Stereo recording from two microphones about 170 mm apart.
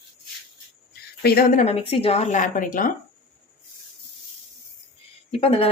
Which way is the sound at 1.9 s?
35° left (ahead or behind).